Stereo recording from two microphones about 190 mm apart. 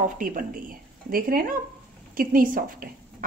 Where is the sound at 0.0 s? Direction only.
45° right (ahead or behind).